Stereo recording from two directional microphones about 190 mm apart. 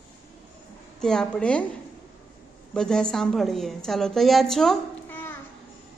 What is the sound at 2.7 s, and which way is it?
A woman's voice, 5° left (ahead or behind).